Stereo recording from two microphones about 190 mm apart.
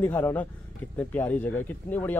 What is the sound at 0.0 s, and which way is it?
Speech, 10° left (ahead or behind).